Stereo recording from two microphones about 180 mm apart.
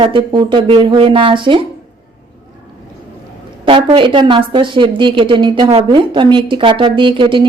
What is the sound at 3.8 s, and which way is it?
Speech, 30° right (ahead or behind).